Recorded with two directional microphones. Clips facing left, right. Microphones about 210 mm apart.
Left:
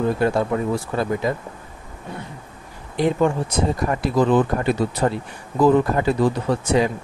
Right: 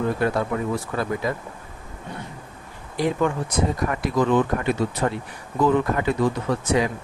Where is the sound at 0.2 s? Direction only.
30° left (ahead or behind).